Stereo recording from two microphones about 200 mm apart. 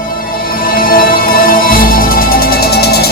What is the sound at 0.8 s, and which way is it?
Music, 45° left (ahead or behind).